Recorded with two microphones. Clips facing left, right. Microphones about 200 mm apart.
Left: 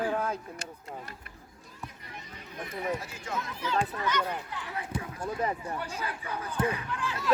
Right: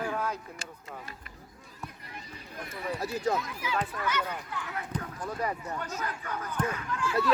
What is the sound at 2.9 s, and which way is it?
Speech, 35° right (ahead or behind).